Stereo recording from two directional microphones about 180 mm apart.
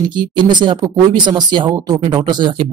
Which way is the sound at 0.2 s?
25° right (ahead or behind).